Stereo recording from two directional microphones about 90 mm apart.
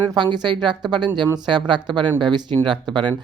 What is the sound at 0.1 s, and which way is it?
Speech, 55° right (ahead or behind).